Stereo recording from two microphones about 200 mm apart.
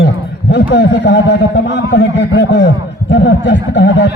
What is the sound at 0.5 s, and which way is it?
Speech, 65° left (ahead or behind).